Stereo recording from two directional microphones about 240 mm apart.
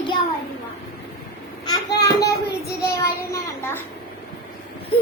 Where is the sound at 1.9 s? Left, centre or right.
Left.